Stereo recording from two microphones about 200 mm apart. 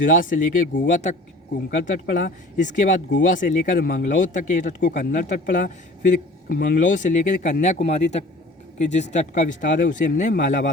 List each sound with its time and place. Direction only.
0.0 s speech: 40° left (ahead or behind)